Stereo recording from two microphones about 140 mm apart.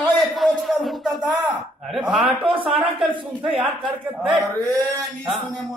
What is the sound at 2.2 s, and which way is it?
Speech, 40° right (ahead or behind).